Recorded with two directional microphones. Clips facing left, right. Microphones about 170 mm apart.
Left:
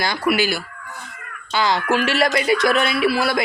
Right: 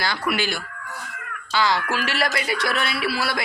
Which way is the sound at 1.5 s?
20° left (ahead or behind).